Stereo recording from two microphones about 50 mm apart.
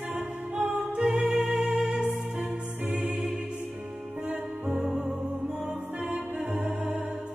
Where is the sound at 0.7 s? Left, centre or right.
Right.